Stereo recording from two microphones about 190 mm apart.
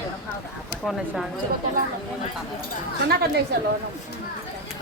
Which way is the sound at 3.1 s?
55° right (ahead or behind).